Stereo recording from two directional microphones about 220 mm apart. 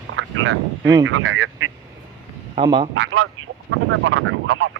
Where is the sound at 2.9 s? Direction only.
70° right (ahead or behind).